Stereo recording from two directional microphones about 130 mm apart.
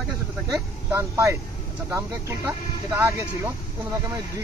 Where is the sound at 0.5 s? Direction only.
20° right (ahead or behind).